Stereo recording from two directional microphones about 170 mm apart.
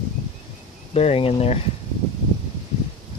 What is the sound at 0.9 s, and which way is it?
Speech, 35° left (ahead or behind).